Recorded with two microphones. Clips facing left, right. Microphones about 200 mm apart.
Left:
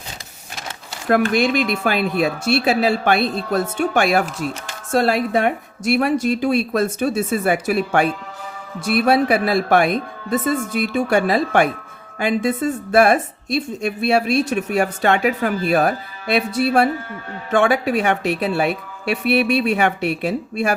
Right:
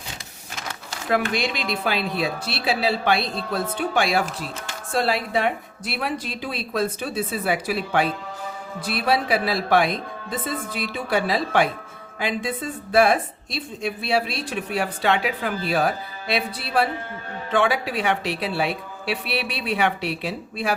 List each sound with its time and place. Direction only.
1.3 s speech: 50° left (ahead or behind)